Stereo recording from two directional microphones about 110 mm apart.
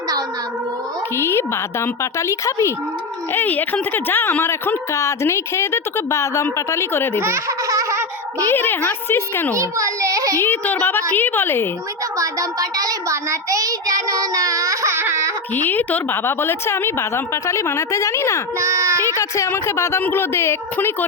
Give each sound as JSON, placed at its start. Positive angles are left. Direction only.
{"t": 1.1, "sound": "a woman's voice", "side_deg": 25}
{"t": 3.3, "sound": "a woman's voice", "side_deg": 15}
{"t": 7.2, "sound": "baby laughter", "side_deg": -25}
{"t": 8.4, "sound": "a woman's voice", "side_deg": 20}
{"t": 9.6, "sound": "a child's voice", "side_deg": -30}
{"t": 10.4, "sound": "a woman's voice", "side_deg": 20}
{"t": 12.1, "sound": "child singing", "side_deg": -30}
{"t": 15.6, "sound": "a woman's voice", "side_deg": 15}
{"t": 18.6, "sound": "a child's voice", "side_deg": -25}
{"t": 19.0, "sound": "a woman's voice", "side_deg": 30}